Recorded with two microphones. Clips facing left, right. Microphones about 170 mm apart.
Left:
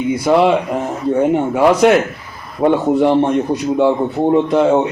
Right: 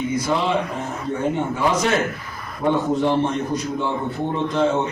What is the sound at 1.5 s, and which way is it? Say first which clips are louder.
A man's voice: left 11 dB; 75° left (ahead or behind).